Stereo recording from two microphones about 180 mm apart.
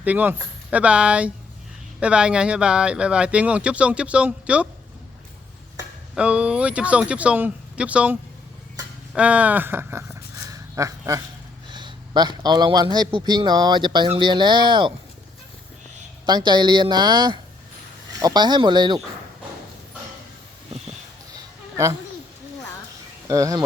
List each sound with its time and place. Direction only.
0.0 s speech: 10° right (ahead or behind)
6.1 s speech: 5° right (ahead or behind)
10.5 s a sound: 20° right (ahead or behind)
12.4 s speech: 25° right (ahead or behind)
16.2 s speech: 25° right (ahead or behind)
21.3 s a sound: 15° right (ahead or behind)
23.3 s speech: 20° right (ahead or behind)